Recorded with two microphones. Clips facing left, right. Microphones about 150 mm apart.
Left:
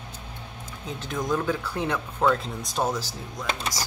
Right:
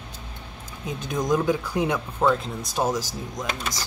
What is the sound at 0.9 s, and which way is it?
Speech, 15° right (ahead or behind).